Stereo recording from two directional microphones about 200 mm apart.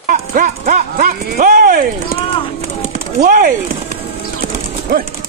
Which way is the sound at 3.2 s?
40° right (ahead or behind).